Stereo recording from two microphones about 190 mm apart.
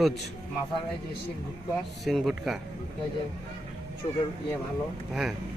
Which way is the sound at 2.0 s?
Centre (ahead or behind).